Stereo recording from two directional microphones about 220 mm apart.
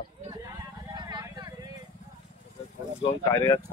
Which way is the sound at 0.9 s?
15° right (ahead or behind).